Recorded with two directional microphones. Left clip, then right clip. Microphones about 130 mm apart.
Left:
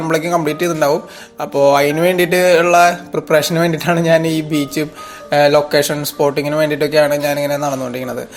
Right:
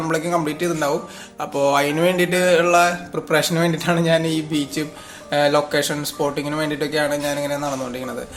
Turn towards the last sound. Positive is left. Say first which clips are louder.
# left 6 dB
turn(degrees=40)  # may be behind; listen again after turning